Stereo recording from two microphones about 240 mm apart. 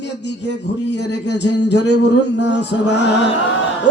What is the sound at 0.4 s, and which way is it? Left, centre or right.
Speech, left.